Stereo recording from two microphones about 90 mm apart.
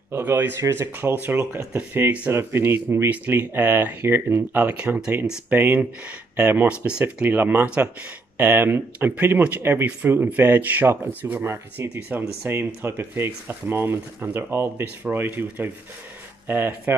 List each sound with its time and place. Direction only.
0.1 s speech: 25° right (ahead or behind); by 5.4 s 10° right (ahead or behind)
5.5 s speech: 20° right (ahead or behind)